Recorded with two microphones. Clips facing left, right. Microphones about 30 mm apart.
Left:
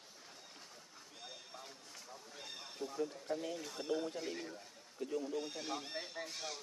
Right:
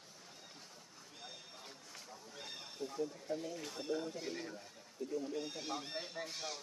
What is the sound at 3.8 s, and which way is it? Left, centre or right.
Speech, centre.